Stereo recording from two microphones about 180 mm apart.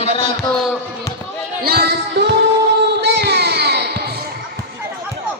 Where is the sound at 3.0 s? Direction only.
65° right (ahead or behind).